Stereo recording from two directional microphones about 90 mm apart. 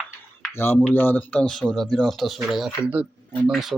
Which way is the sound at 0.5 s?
25° left (ahead or behind).